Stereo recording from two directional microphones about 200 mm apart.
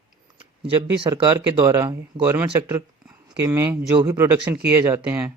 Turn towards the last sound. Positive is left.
turn(degrees=-15)  # may be behind; listen again after turning